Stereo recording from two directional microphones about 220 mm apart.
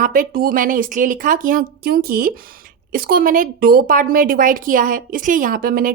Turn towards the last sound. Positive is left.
turn(degrees=-40)  # may be behind; listen again after turning